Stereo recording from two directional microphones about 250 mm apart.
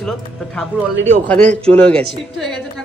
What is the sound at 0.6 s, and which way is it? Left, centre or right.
Speech, centre.